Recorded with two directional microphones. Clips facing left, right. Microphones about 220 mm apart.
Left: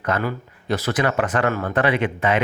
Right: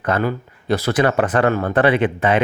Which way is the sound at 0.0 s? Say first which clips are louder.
Right 4 dB; 30° right (ahead or behind).